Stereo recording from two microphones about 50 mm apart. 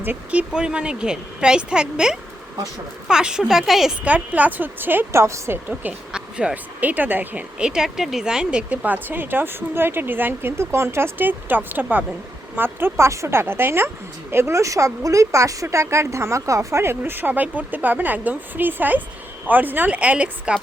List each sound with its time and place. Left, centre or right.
0.3 s a woman's voice: right; by 3.9 s centre
4.0 s speech: right
5.1 s a woman's voice: right
5.5 s speech: right
6.1 s a sound: centre
6.7 s speech: right
7.6 s speech: centre
8.8 s speech: right
10.6 s a woman's voice: right
11.3 s speech: right
13.0 s a woman's voice: right
14.5 s speech: right
15.7 s a woman's voice: right
17.0 s speech: right